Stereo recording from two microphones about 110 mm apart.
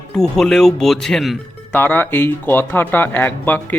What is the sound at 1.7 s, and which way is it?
A man's voice, 15° left (ahead or behind).